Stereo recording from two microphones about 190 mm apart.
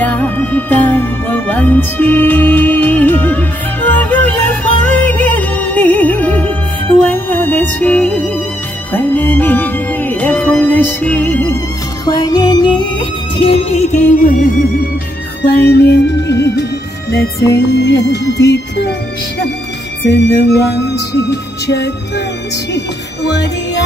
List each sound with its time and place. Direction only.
0.0 s music: 10° left (ahead or behind)
12.1 s music: 20° left (ahead or behind); by 14.9 s 50° left (ahead or behind)
15.4 s music: 60° left (ahead or behind)
17.5 s music: 65° left (ahead or behind)
20.1 s music: 65° left (ahead or behind)
23.2 s music: 65° left (ahead or behind)